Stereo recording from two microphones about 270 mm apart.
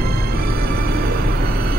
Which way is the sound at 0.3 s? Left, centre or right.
Right.